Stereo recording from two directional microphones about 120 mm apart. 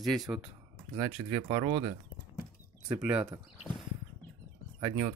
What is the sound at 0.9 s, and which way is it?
Speech, 40° right (ahead or behind).